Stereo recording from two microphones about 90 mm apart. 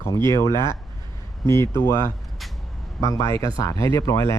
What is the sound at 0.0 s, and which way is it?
Speech, 35° left (ahead or behind).